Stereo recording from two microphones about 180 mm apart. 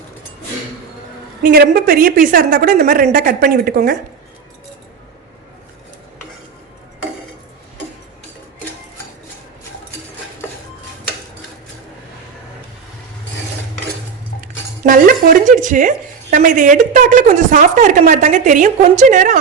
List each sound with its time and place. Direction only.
1.4 s a woman's voice: 55° right (ahead or behind)
14.8 s a woman's voice: 50° right (ahead or behind)